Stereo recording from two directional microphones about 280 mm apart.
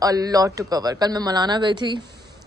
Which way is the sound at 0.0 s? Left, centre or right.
Centre.